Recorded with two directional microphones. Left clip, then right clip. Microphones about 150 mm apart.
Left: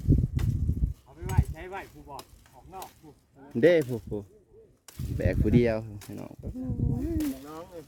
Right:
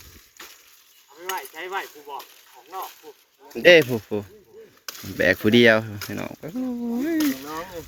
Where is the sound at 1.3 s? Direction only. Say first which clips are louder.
Right 8 dB; 10° left (ahead or behind).